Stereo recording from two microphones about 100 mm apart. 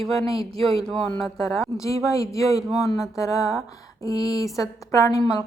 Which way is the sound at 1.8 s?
35° left (ahead or behind).